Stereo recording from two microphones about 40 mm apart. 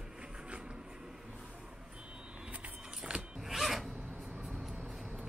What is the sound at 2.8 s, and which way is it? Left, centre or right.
Vehicle, centre.